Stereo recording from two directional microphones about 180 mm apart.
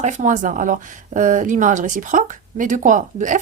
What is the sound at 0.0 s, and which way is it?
Speech, 45° right (ahead or behind).